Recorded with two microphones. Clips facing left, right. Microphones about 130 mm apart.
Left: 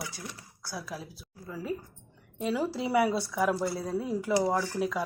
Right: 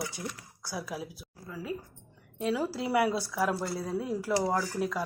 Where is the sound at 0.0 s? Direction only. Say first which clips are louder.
Right 3 dB; 25° right (ahead or behind).